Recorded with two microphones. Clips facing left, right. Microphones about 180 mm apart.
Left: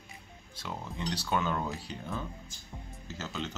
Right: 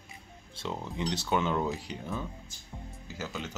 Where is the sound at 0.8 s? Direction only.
20° right (ahead or behind).